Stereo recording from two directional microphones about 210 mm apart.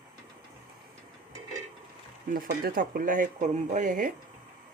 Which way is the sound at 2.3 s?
40° right (ahead or behind).